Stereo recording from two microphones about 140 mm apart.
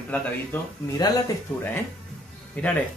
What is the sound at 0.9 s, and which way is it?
Speech, 25° left (ahead or behind).